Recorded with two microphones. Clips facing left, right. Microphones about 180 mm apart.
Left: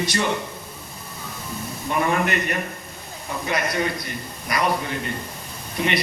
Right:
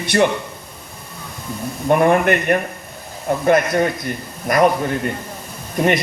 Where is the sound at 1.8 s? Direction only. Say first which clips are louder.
Right 8 dB; 55° right (ahead or behind).